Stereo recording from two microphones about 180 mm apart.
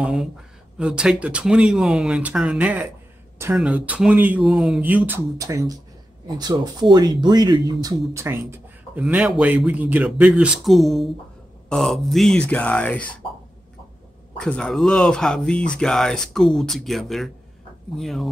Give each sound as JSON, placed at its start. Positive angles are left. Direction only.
{"t": 0.0, "sound": "speech", "side_deg": -5}
{"t": 14.3, "sound": "speech", "side_deg": 5}